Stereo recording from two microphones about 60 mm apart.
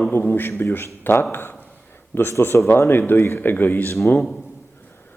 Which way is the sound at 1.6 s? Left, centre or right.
Left.